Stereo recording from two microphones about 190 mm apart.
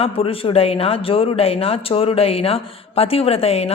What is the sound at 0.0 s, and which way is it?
A woman's voice, 30° left (ahead or behind).